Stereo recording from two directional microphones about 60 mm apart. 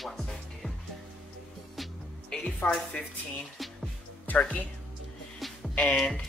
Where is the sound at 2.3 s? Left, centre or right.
Centre.